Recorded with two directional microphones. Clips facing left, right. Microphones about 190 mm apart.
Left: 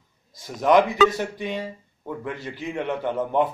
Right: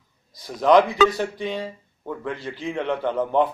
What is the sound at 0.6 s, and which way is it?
A man's voice, 20° left (ahead or behind).